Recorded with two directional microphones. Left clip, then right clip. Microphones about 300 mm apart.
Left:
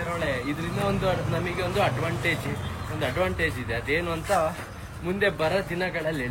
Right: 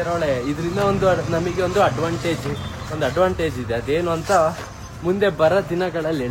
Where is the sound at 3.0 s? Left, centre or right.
Centre.